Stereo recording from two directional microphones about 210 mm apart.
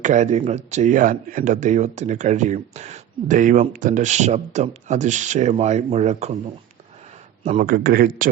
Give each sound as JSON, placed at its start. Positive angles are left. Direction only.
{"t": 0.0, "sound": "speech", "side_deg": -35}
{"t": 7.4, "sound": "a man's voice", "side_deg": -40}